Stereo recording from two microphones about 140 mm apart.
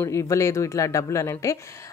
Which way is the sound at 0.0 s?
20° left (ahead or behind).